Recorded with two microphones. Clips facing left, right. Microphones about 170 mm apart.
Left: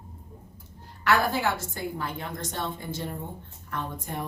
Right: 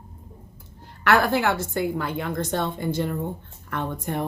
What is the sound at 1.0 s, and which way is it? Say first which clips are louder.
A woman's voice: right 4 dB; 70° right (ahead or behind).